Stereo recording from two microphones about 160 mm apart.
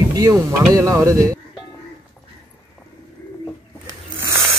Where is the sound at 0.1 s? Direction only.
20° right (ahead or behind).